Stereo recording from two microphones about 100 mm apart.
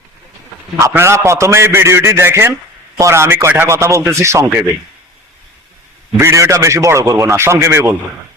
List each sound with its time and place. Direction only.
0.8 s a man's voice: 30° right (ahead or behind)
6.1 s a man's voice: 25° right (ahead or behind)